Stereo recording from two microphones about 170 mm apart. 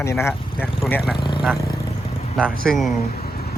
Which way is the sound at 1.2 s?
30° left (ahead or behind).